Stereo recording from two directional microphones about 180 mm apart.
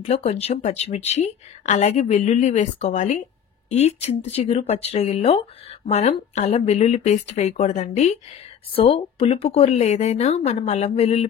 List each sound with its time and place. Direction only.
0.0 s speech: 35° left (ahead or behind)